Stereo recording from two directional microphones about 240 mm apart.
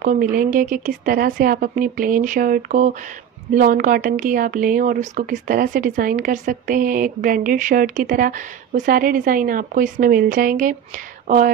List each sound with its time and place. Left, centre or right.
0.0 s speech: right